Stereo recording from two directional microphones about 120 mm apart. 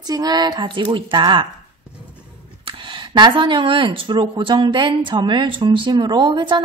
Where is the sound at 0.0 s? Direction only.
35° right (ahead or behind).